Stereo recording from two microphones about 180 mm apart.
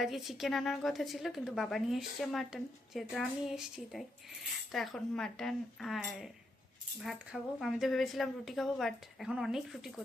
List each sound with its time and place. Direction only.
0.0 s a woman's voice: centre (ahead or behind)
7.6 s a woman's voice: centre (ahead or behind)